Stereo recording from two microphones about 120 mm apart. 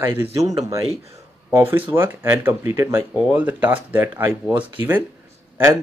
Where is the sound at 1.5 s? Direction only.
20° right (ahead or behind).